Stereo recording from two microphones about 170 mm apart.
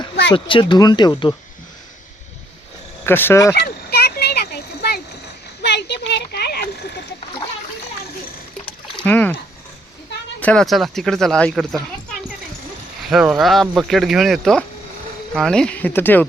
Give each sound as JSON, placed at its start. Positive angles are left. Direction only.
{"t": 0.3, "sound": "speech", "side_deg": 30}
{"t": 3.1, "sound": "speech", "side_deg": 15}
{"t": 3.5, "sound": "fowl", "side_deg": 70}
{"t": 5.6, "sound": "a sound", "side_deg": 90}
{"t": 9.0, "sound": "a sound", "side_deg": 10}
{"t": 10.4, "sound": "speech", "side_deg": 5}